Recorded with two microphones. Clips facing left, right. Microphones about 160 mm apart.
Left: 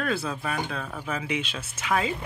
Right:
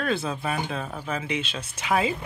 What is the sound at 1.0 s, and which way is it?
Speech, 10° left (ahead or behind).